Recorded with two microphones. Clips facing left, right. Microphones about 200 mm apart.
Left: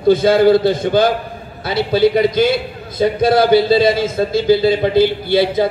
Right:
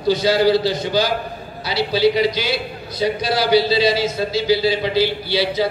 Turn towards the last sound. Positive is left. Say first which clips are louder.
# left 5 dB
turn(degrees=50)  # may be behind; listen again after turning